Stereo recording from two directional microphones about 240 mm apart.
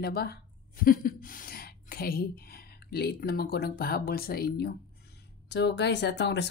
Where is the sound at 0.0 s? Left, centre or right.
Left.